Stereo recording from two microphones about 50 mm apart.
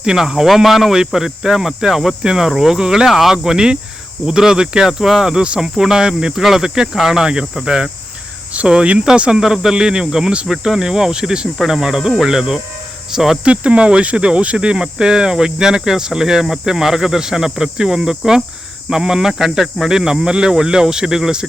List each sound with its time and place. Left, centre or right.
0.0 s cricket: centre
3.1 s speech: centre
3.3 s cricket: centre
8.5 s speech: centre
9.4 s cricket: centre
13.1 s speech: centre
13.4 s cricket: right